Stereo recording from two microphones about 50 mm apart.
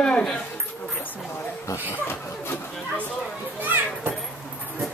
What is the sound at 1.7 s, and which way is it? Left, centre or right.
Speech, left.